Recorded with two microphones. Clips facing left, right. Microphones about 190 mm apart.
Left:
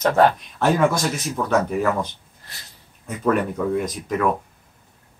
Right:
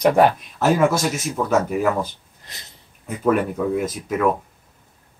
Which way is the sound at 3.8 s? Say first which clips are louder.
Right 1 dB; 5° right (ahead or behind).